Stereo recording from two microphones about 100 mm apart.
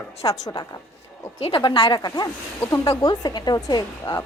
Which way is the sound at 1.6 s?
60° left (ahead or behind).